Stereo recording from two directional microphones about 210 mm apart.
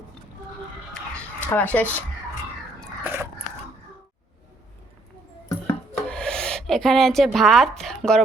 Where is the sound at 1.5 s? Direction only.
5° left (ahead or behind).